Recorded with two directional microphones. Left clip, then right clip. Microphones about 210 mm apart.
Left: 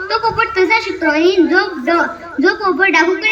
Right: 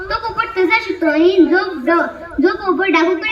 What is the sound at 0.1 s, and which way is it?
A woman's voice, 45° left (ahead or behind).